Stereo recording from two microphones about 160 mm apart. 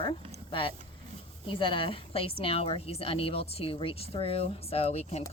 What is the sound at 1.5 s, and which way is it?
Speech, 30° left (ahead or behind).